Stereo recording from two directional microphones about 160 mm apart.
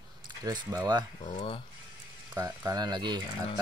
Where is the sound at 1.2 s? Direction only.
45° left (ahead or behind).